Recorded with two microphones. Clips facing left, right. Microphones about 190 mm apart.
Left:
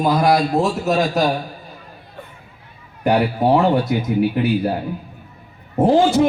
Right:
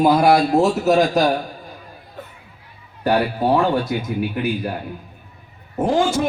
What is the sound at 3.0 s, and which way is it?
Speech, 20° left (ahead or behind).